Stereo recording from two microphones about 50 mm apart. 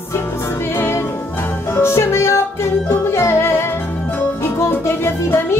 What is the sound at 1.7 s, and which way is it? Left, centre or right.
Music, left.